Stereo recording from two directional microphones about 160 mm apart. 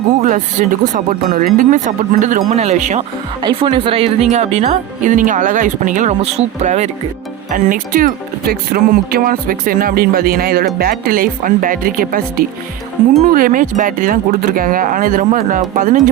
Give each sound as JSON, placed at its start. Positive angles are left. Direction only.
{"t": 0.2, "sound": "speech", "side_deg": -50}
{"t": 3.4, "sound": "speech", "side_deg": -35}
{"t": 7.5, "sound": "speech", "side_deg": -55}